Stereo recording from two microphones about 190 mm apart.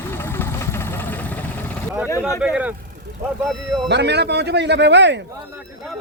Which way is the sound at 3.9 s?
65° right (ahead or behind).